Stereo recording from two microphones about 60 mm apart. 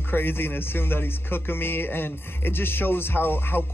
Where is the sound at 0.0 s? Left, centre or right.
Left.